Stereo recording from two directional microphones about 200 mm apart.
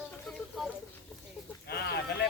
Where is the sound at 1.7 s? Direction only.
55° left (ahead or behind).